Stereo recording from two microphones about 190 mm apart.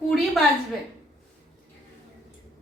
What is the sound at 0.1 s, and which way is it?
Speech, centre (ahead or behind).